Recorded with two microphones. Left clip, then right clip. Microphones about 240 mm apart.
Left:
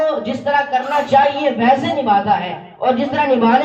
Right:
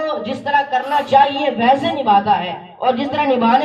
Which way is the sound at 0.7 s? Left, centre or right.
Right.